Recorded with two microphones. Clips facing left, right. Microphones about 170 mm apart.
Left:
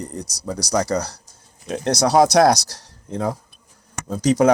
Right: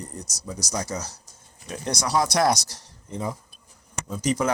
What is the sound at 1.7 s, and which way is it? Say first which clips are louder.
Speech: left 8 dB; 90° left.